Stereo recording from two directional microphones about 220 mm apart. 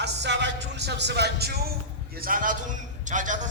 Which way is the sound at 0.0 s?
50° right (ahead or behind).